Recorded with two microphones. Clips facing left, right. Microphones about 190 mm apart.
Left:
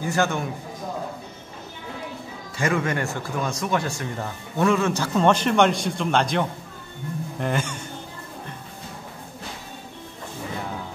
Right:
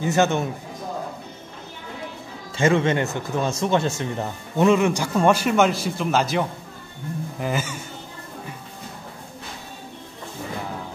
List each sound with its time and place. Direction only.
0.0 s speech: 20° right (ahead or behind)
2.5 s speech: 25° right (ahead or behind); by 7.8 s 5° right (ahead or behind)